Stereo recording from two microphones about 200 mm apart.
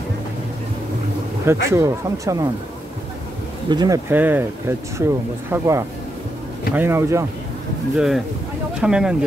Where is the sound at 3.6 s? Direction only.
20° right (ahead or behind).